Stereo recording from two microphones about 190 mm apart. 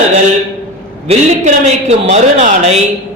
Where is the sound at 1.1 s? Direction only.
35° right (ahead or behind).